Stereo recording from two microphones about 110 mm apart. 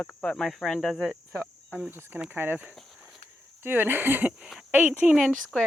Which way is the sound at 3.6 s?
20° right (ahead or behind).